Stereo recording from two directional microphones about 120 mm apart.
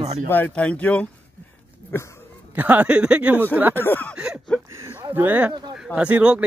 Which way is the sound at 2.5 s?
15° right (ahead or behind).